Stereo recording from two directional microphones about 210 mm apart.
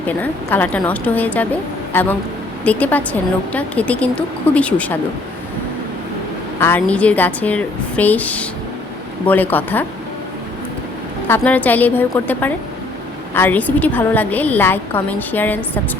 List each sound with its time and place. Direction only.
0.2 s a woman's voice: 10° left (ahead or behind)
6.6 s a woman's voice: 10° left (ahead or behind)
11.3 s a woman's voice: 10° left (ahead or behind)